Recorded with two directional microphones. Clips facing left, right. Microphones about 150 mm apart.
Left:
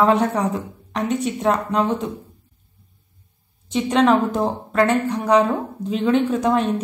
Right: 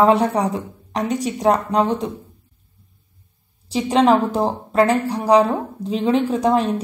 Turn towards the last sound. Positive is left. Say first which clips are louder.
# right 1 dB
turn(degrees=-35)  # may be behind; listen again after turning